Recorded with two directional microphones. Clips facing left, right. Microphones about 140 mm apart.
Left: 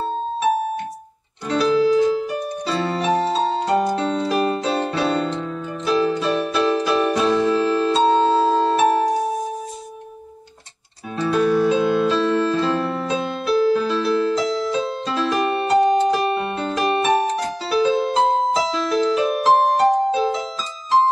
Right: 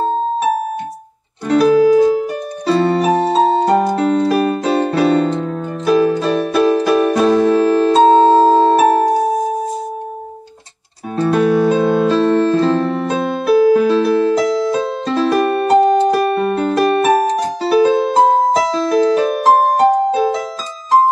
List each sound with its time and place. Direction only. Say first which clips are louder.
1.5 s music: right 7 dB; 50° right (ahead or behind)
11.1 s music: right 4 dB; 50° right (ahead or behind)